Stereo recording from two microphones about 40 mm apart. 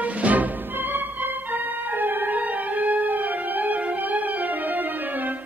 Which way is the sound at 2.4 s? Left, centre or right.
Right.